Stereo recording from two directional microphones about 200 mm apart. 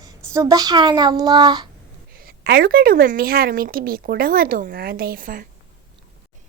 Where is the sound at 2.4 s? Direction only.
50° right (ahead or behind).